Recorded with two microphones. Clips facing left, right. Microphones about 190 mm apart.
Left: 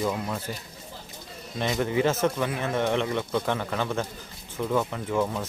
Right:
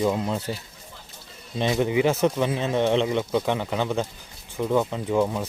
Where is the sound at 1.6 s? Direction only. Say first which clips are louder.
Right 3 dB; 20° right (ahead or behind).